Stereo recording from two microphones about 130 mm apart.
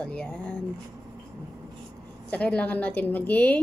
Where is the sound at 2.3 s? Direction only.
10° left (ahead or behind).